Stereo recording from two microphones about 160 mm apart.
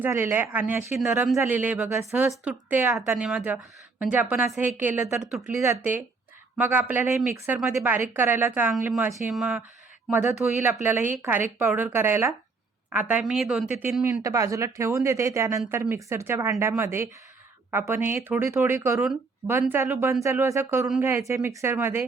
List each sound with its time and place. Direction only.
0.0 s speech: 15° right (ahead or behind)